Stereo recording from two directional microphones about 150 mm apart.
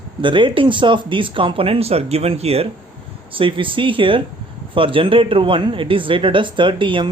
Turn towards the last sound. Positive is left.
turn(degrees=-35)  # may be behind; listen again after turning